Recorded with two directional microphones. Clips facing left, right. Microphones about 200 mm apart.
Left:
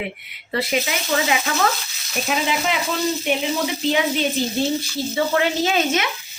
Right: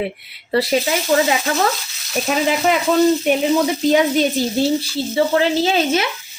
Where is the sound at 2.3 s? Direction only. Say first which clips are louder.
Right 4 dB; 45° right (ahead or behind).